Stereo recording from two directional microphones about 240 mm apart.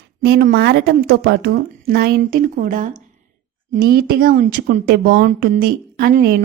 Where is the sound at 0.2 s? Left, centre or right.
Right.